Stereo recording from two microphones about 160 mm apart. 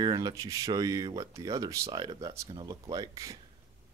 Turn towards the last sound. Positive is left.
turn(degrees=-20)  # may be behind; listen again after turning